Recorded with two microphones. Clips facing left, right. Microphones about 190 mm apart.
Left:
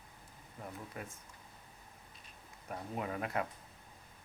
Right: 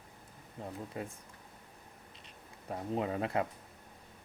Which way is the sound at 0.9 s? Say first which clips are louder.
Right 7 dB; 25° right (ahead or behind).